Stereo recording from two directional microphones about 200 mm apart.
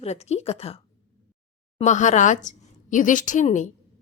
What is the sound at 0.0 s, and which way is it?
Speech, 30° left (ahead or behind).